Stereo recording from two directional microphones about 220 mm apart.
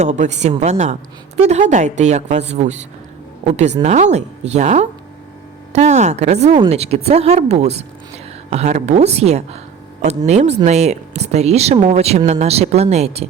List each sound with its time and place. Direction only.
0.0 s a woman's voice: 35° right (ahead or behind)